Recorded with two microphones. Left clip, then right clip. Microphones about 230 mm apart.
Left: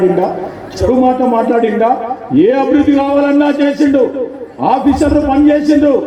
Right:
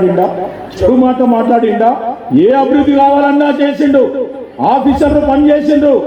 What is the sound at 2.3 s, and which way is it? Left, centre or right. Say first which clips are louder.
A man's voice: right 1 dB; right.